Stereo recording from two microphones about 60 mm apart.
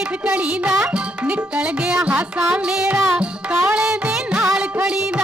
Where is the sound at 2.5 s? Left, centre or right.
Centre.